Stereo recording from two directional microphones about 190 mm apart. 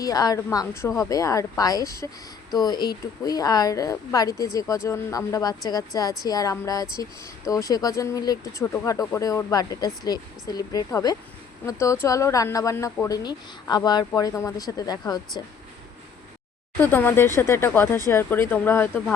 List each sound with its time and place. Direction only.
0.0 s a woman's voice: 20° left (ahead or behind)
16.8 s a woman's voice: 10° left (ahead or behind)